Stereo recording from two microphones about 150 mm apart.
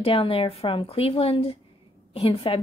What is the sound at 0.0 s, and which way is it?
A woman's voice, 40° left (ahead or behind).